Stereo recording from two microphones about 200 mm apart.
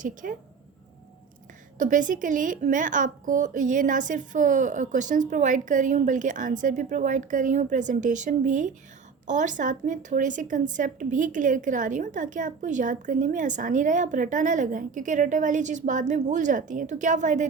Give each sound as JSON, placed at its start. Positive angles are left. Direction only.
{"t": 0.0, "sound": "speech", "side_deg": -40}
{"t": 1.8, "sound": "speech", "side_deg": -40}